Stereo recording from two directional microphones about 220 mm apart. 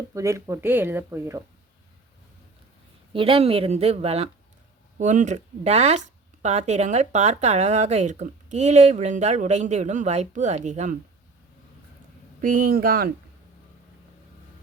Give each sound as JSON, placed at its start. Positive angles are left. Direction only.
{"t": 0.1, "sound": "speech", "side_deg": -15}
{"t": 3.1, "sound": "speech", "side_deg": -25}
{"t": 12.4, "sound": "speech", "side_deg": -40}